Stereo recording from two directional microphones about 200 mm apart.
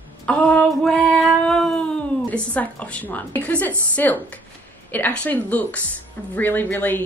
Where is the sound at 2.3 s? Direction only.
5° left (ahead or behind).